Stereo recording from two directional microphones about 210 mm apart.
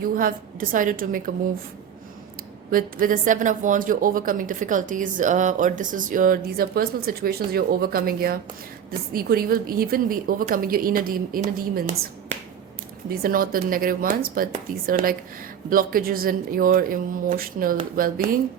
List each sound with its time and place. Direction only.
0.0 s speech: 40° right (ahead or behind)
2.6 s a woman's voice: 40° right (ahead or behind)
13.1 s a woman's voice: 45° right (ahead or behind)